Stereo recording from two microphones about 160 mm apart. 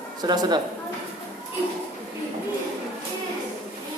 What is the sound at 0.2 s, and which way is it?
Speech, 25° right (ahead or behind).